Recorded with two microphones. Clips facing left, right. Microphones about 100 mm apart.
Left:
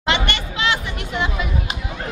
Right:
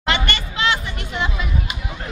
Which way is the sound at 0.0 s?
20° left (ahead or behind).